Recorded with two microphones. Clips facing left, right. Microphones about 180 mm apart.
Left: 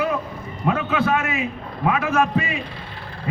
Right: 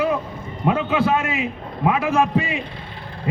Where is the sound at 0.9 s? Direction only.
30° right (ahead or behind).